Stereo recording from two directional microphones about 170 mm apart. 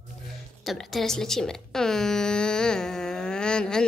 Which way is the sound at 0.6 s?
Centre (ahead or behind).